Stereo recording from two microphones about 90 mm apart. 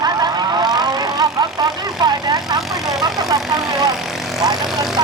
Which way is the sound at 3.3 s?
45° right (ahead or behind).